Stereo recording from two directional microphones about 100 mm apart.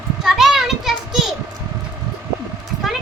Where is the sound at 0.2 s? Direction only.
5° right (ahead or behind).